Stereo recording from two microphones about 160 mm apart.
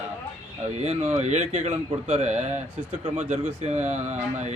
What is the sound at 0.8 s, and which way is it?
A man's voice, 45° right (ahead or behind).